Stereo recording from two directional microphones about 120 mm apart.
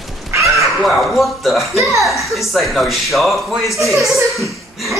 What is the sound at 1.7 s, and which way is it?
Speech, 25° right (ahead or behind).